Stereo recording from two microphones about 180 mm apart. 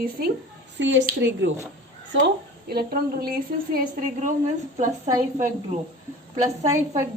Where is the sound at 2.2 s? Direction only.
60° right (ahead or behind).